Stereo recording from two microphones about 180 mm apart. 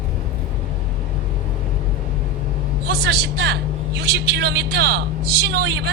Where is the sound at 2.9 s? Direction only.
65° right (ahead or behind).